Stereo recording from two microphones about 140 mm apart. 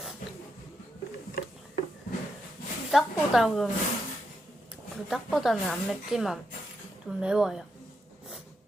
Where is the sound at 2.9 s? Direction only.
Centre (ahead or behind).